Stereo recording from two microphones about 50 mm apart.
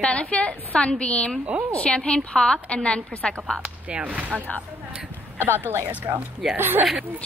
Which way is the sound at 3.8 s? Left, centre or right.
Right.